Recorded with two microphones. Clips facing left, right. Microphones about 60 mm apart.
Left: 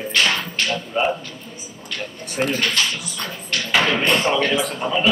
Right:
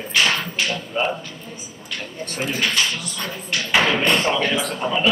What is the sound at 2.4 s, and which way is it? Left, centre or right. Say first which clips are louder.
A man's voice: even; centre.